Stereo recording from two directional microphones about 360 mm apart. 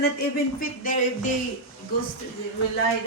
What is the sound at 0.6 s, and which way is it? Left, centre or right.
Speech, left.